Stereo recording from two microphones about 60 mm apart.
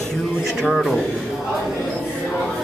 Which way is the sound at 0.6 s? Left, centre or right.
Centre.